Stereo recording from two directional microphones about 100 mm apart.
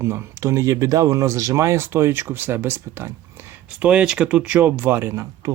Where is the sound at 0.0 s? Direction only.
25° right (ahead or behind).